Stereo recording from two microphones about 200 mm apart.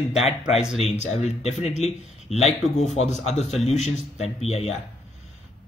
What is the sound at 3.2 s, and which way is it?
Speech, 35° left (ahead or behind).